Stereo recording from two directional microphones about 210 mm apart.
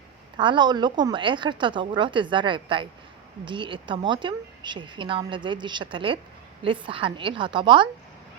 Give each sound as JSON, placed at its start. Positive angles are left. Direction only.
{"t": 0.3, "sound": "a woman's voice", "side_deg": -20}